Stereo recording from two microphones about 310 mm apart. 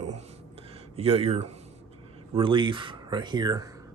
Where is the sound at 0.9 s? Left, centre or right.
Centre.